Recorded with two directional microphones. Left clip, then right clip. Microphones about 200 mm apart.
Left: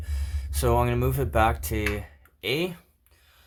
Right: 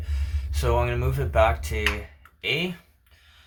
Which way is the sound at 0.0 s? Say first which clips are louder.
Right 2 dB; 60° left (ahead or behind).